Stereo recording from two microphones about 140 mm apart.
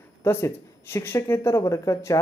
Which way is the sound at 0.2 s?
20° left (ahead or behind).